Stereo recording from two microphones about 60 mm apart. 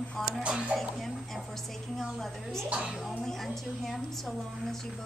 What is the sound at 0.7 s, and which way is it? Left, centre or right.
Speech, centre.